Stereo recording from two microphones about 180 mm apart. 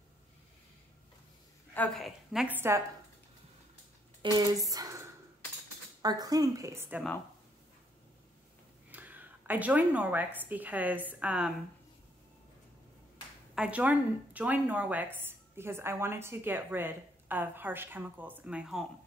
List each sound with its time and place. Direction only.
1.7 s a woman's voice: 5° left (ahead or behind); by 2.8 s 10° right (ahead or behind)
4.2 s a woman's voice: 20° right (ahead or behind)
6.0 s a woman's voice: 20° right (ahead or behind)
8.9 s a woman's voice: 10° right (ahead or behind)
13.6 s speech: 5° right (ahead or behind)